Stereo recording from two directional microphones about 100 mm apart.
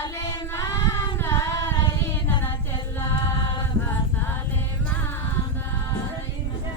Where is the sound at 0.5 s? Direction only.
30° left (ahead or behind).